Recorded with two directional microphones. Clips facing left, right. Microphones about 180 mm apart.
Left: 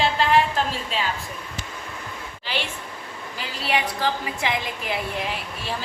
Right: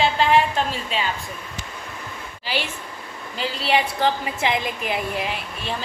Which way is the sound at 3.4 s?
25° right (ahead or behind).